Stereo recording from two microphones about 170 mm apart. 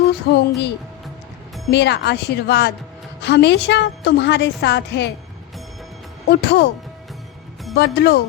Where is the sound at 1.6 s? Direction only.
85° left.